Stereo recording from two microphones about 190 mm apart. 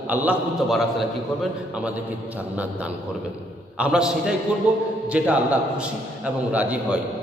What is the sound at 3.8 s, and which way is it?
A man's voice, 5° right (ahead or behind).